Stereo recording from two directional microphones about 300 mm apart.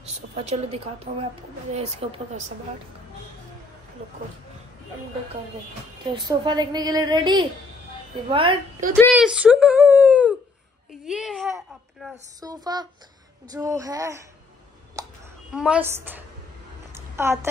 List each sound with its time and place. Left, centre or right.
0.0 s a woman's voice: right
6.1 s a woman's voice: centre
8.9 s whimper: centre
10.9 s a woman's voice: centre
15.0 s a sound: centre
15.5 s a woman's voice: centre
16.9 s a sound: centre